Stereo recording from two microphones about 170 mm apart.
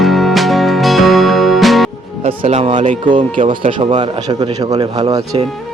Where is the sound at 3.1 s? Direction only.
30° right (ahead or behind).